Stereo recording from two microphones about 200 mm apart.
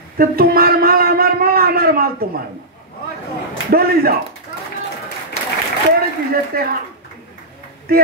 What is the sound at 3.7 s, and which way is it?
Speech, 50° right (ahead or behind).